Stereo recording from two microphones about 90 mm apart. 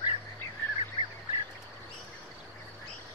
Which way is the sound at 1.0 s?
40° right (ahead or behind).